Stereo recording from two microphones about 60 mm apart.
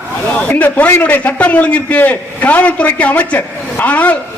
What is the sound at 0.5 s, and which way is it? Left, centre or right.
A man's voice, left.